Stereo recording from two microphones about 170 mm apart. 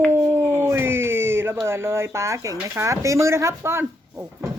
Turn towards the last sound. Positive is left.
turn(degrees=-15)  # may be behind; listen again after turning